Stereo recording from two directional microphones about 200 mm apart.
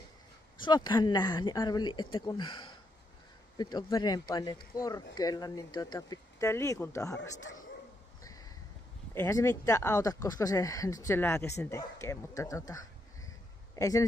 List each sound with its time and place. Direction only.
0.7 s speech: 20° left (ahead or behind)
3.7 s speech: 20° left (ahead or behind)
8.2 s a sound: 15° left (ahead or behind)
9.1 s speech: 10° left (ahead or behind)